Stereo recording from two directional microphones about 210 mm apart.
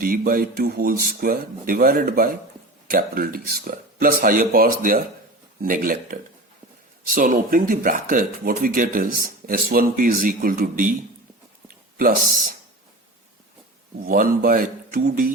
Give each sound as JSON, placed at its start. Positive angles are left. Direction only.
{"t": 0.0, "sound": "speech", "side_deg": -40}
{"t": 11.9, "sound": "speech", "side_deg": -40}
{"t": 14.0, "sound": "speech", "side_deg": -40}